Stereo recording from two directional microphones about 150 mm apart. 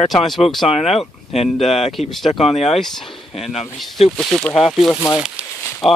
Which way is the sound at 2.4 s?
45° left (ahead or behind).